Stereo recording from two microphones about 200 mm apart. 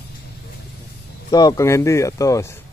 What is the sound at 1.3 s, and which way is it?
Speech, 20° left (ahead or behind).